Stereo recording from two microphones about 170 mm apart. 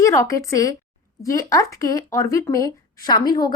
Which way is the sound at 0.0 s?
20° left (ahead or behind).